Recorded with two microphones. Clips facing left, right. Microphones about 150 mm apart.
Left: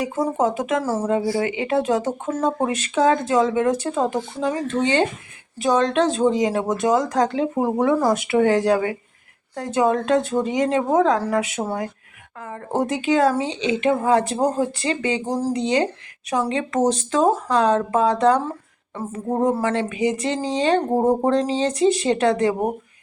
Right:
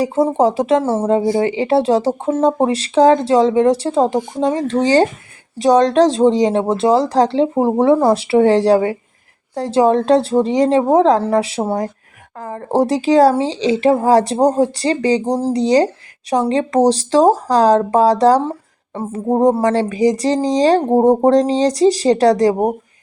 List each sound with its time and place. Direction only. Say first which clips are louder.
0.0 s speech: right 7 dB; 30° right (ahead or behind)